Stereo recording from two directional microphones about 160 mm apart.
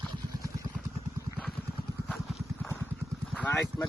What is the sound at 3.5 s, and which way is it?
Speech, 15° left (ahead or behind).